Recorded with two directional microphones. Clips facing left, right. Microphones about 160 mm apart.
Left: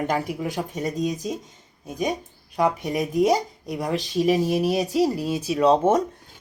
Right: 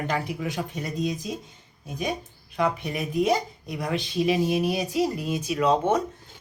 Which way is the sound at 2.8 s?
40° left (ahead or behind).